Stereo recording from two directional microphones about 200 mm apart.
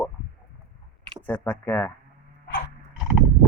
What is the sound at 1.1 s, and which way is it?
Speech, 10° left (ahead or behind).